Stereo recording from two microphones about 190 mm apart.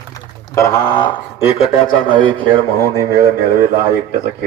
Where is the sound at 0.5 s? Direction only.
15° left (ahead or behind).